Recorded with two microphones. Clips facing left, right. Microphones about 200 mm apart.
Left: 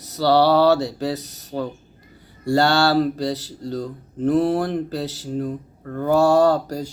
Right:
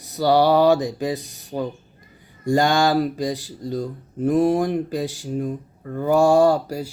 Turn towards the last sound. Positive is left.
turn(degrees=-10)  # may be behind; listen again after turning